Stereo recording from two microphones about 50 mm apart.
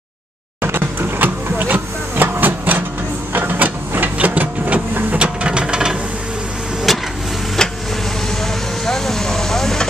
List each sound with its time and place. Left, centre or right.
0.6 s vehicle: right
3.3 s printer: right
5.1 s a sound: right
6.9 s vehicle: centre
8.8 s vehicle: centre